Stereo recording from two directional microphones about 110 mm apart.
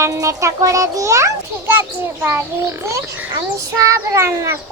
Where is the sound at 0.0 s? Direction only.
30° right (ahead or behind).